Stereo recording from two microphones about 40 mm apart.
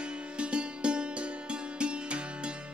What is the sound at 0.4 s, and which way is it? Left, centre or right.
Music, right.